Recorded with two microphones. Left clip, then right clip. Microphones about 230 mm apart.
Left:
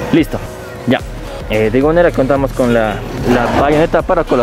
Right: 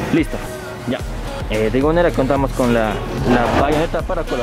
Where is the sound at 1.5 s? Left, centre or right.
Centre.